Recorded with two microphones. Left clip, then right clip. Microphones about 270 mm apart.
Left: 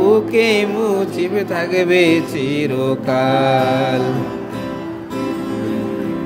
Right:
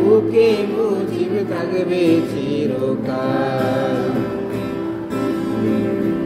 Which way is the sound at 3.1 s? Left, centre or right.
Left.